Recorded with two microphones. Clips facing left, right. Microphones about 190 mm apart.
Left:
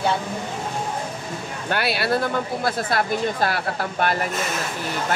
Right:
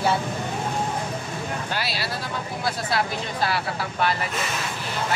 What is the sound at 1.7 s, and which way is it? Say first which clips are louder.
Speech: left 7 dB; 60° left (ahead or behind).